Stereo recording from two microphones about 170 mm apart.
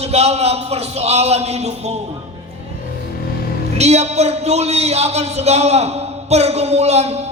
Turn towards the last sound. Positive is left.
turn(degrees=-40)  # may be behind; listen again after turning